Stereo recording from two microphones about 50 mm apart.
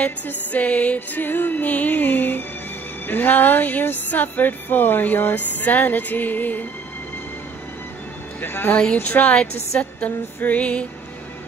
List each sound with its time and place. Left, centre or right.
0.0 s music: left
0.9 s music: left
8.4 s a woman's voice: left
8.9 s music: left